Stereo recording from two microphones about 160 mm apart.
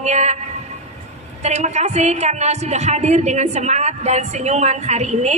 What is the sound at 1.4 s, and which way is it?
A woman's voice, 45° right (ahead or behind).